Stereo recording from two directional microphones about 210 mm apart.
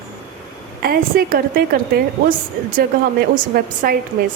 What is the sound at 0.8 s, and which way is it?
A woman's voice, 45° right (ahead or behind).